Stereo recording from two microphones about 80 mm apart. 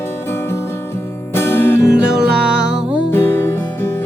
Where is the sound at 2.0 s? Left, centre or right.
Centre.